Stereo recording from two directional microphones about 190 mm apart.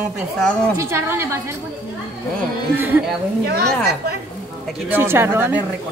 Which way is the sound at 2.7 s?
10° right (ahead or behind).